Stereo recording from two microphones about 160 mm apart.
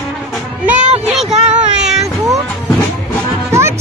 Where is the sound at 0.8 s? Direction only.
45° right (ahead or behind).